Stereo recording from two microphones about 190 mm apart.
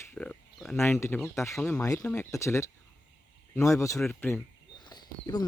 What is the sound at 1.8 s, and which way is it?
Speech, 15° left (ahead or behind).